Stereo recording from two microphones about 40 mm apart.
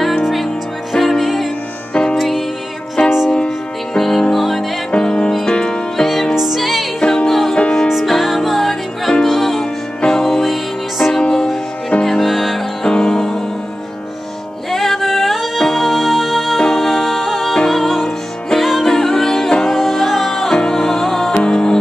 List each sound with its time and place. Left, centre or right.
0.2 s music: centre
3.0 s music: left
3.4 s music: centre
4.9 s music: left
5.9 s music: centre
7.0 s music: left
7.2 s music: centre
10.4 s music: centre
11.1 s music: centre
12.3 s music: centre
12.8 s music: centre
14.7 s music: centre
21.3 s music: left